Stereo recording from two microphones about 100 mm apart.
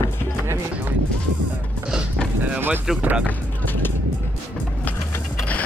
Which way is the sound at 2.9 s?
15° right (ahead or behind).